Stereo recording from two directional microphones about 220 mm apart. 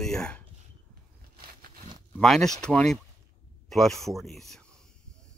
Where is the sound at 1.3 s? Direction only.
40° right (ahead or behind).